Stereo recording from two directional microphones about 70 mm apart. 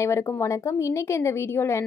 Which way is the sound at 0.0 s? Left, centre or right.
Left.